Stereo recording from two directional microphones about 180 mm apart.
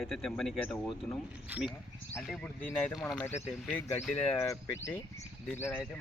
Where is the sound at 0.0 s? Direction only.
Centre (ahead or behind).